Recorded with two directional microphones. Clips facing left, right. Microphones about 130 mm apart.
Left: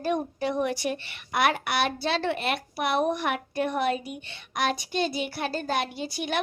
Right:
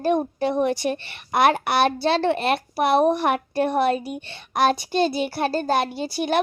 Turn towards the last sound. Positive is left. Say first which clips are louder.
# right 7 dB
turn(degrees=-35)  # may be behind; listen again after turning